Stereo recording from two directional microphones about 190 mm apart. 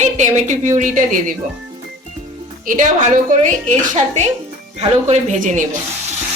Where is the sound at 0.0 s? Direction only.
40° right (ahead or behind).